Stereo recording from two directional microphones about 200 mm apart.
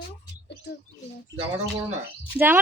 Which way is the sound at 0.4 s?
55° left (ahead or behind).